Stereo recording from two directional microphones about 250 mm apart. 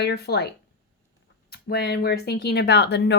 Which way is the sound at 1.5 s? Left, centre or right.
Left.